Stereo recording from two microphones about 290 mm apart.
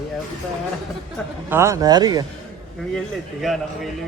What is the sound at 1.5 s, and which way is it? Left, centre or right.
Speech, centre.